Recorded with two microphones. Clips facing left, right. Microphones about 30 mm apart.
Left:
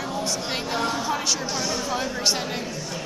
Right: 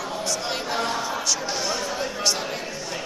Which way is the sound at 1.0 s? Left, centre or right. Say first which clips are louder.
Left 1 dB; centre.